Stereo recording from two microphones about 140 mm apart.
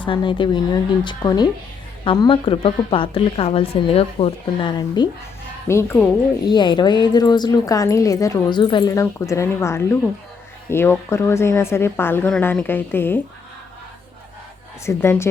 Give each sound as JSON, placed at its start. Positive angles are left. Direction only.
{"t": 0.0, "sound": "a woman's voice", "side_deg": 35}
{"t": 5.0, "sound": "a woman's voice", "side_deg": 30}
{"t": 5.6, "sound": "a woman's voice", "side_deg": 20}
{"t": 6.4, "sound": "a woman's voice", "side_deg": 30}
{"t": 14.8, "sound": "a woman's voice", "side_deg": 20}